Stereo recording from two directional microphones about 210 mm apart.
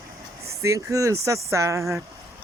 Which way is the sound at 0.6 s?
15° right (ahead or behind).